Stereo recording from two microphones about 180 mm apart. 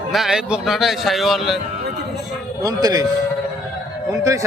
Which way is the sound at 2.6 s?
20° right (ahead or behind).